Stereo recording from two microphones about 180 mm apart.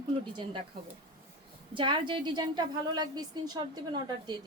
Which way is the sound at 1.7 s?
25° right (ahead or behind).